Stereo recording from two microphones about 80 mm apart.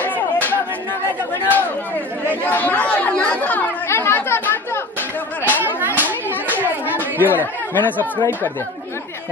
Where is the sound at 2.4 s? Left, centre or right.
Left.